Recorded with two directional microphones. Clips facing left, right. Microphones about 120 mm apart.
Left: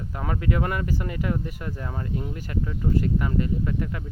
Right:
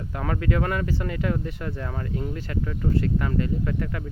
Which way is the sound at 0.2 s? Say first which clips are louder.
Right 1 dB; 15° left (ahead or behind).